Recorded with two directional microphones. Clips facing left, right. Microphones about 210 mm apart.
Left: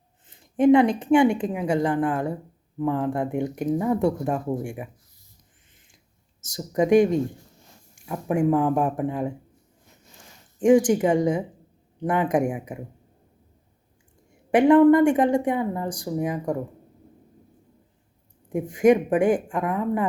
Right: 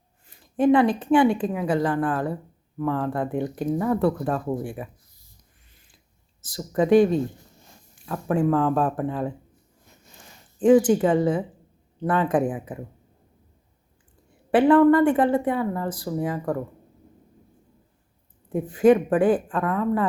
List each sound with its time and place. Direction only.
0.3 s a woman's voice: 20° left (ahead or behind)
6.5 s a woman's voice: 15° left (ahead or behind)
10.6 s a woman's voice: 15° left (ahead or behind)
14.5 s a woman's voice: 15° left (ahead or behind)
18.4 s a woman's voice: 15° left (ahead or behind)